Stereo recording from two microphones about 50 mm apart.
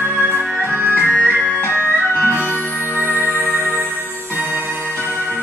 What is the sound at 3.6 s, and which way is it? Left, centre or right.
Music, right.